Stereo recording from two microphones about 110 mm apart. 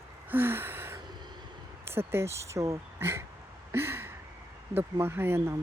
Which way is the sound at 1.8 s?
20° right (ahead or behind).